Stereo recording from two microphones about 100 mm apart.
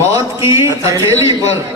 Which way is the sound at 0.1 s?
30° right (ahead or behind).